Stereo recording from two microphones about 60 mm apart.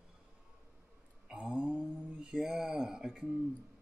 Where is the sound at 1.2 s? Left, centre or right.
Centre.